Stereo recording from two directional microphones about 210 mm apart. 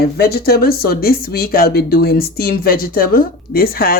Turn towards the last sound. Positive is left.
turn(degrees=45)  # may be behind; listen again after turning